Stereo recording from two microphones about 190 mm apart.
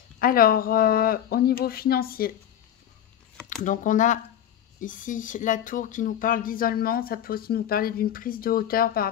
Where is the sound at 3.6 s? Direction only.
45° left (ahead or behind).